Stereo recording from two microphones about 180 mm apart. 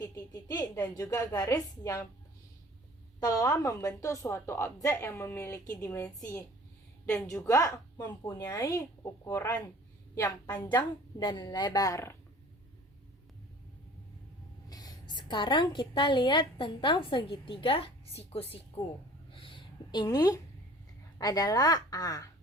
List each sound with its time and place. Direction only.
0.0 s a woman's voice: 20° left (ahead or behind)
3.2 s a woman's voice: 20° left (ahead or behind)
10.8 s a woman's voice: 25° left (ahead or behind)
14.7 s a woman's voice: 20° left (ahead or behind)
18.8 s a woman's voice: 15° left (ahead or behind)
19.3 s a sound: 30° left (ahead or behind)
21.2 s a woman's voice: 20° left (ahead or behind)